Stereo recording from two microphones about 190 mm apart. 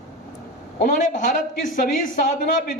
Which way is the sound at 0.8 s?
45° left (ahead or behind).